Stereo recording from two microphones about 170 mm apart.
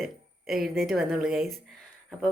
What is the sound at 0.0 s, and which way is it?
Speech, centre (ahead or behind).